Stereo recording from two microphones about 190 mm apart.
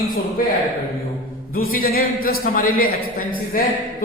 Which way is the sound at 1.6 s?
50° left (ahead or behind).